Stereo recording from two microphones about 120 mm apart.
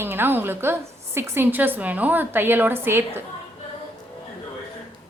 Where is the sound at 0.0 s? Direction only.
15° right (ahead or behind).